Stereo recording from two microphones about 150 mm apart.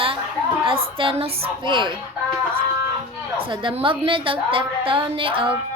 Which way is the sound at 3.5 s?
35° right (ahead or behind).